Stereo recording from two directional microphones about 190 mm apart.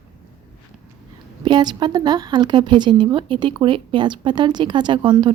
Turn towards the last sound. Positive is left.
turn(degrees=-25)  # may be behind; listen again after turning